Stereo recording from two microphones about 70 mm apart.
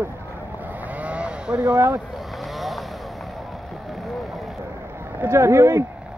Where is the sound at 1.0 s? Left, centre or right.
Centre.